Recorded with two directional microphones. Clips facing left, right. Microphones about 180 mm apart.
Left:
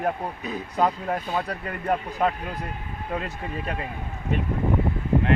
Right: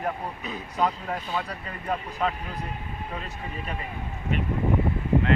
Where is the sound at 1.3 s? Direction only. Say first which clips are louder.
Left 3 dB; 55° left (ahead or behind).